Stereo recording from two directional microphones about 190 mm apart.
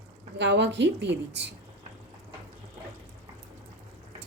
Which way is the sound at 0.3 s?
65° right (ahead or behind).